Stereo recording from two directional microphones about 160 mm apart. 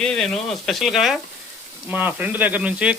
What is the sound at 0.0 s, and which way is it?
Speech, 5° left (ahead or behind).